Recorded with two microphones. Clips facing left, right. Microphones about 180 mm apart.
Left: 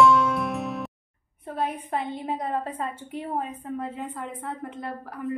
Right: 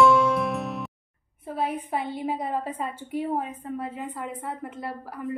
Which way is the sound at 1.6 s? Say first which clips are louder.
Even; 10° right (ahead or behind).